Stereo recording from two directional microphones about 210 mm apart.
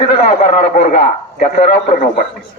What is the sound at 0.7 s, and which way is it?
Speech, 35° left (ahead or behind).